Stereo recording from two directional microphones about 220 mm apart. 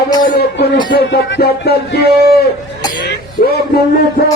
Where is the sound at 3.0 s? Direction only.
50° left (ahead or behind).